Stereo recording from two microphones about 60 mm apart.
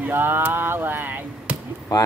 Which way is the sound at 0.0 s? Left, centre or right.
Right.